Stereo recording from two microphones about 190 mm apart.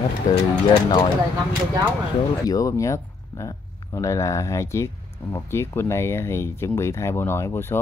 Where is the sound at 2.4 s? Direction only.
20° left (ahead or behind).